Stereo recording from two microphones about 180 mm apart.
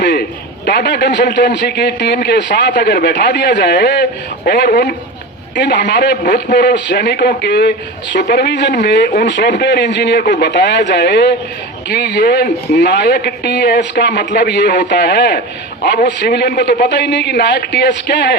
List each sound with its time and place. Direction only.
0.0 s a man's voice: 65° left (ahead or behind)